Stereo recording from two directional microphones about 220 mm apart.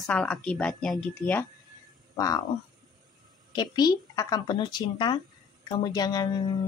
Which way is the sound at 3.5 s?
20° left (ahead or behind).